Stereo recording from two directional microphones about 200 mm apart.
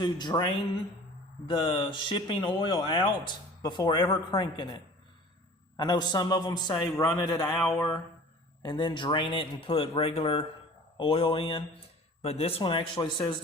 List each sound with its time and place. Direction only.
0.0 s a man's voice: 20° left (ahead or behind)